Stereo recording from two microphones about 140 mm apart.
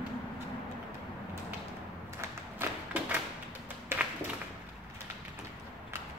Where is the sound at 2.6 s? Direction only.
15° right (ahead or behind).